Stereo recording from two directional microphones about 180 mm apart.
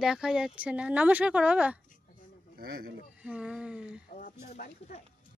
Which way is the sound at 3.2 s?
5° right (ahead or behind).